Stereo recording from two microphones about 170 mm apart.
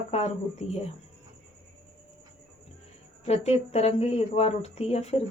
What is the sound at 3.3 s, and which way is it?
Speech, 40° left (ahead or behind).